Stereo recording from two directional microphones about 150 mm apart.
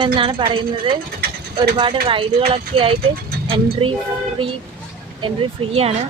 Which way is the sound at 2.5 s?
35° right (ahead or behind).